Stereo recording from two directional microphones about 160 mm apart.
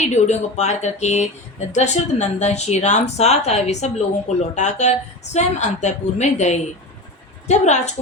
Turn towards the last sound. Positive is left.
turn(degrees=45)  # may be behind; listen again after turning